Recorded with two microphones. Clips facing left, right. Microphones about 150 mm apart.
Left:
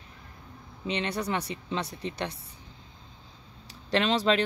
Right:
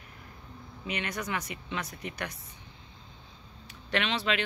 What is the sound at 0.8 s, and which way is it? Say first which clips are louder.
Speech: left 5 dB; 30° left (ahead or behind).